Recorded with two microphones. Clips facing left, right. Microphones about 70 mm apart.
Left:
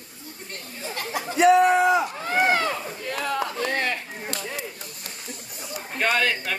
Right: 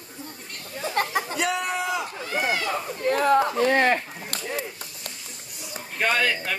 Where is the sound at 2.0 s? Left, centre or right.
Left.